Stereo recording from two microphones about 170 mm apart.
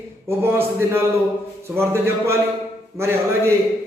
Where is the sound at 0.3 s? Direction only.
15° right (ahead or behind).